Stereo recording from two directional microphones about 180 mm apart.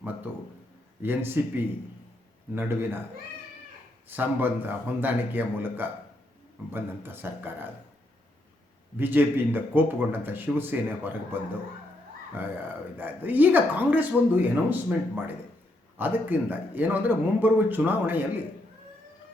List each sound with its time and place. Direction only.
1.0 s speech: 10° right (ahead or behind)
4.1 s speech: 10° right (ahead or behind)
9.0 s speech: 10° right (ahead or behind)